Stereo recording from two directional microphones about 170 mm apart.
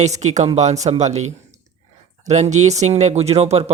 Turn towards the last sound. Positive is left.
turn(degrees=-40)  # may be behind; listen again after turning